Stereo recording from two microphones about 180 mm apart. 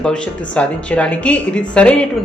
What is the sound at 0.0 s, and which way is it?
A woman's voice, 5° left (ahead or behind).